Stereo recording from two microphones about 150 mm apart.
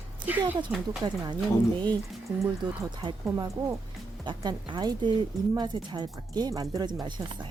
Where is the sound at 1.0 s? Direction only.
30° right (ahead or behind).